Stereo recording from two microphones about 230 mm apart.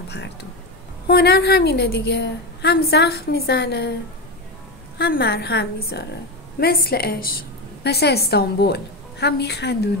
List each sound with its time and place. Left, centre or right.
0.1 s a sound: left
1.0 s a woman's voice: left
4.9 s a woman's voice: left